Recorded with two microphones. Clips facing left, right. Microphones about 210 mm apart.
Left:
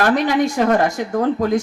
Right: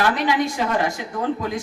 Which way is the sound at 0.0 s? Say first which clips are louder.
Left 4 dB; 45° left (ahead or behind).